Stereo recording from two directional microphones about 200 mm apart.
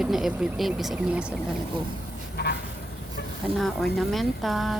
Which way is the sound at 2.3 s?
55° left (ahead or behind).